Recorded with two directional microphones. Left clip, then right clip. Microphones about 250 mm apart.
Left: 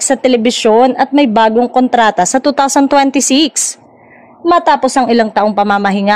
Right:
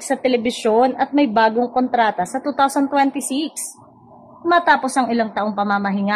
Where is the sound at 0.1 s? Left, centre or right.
Left.